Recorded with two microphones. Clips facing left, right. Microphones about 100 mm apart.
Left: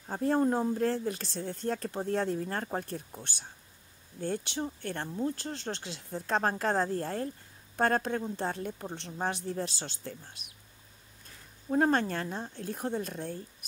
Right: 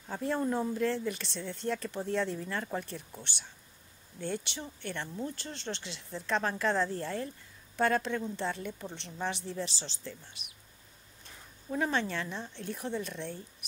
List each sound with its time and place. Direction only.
0.1 s speech: 45° left (ahead or behind)
11.7 s speech: 45° left (ahead or behind)